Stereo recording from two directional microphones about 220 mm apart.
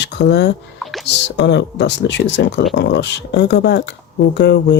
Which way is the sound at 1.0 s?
50° left (ahead or behind).